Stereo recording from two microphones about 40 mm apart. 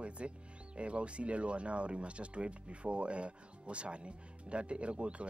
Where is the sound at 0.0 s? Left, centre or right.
Right.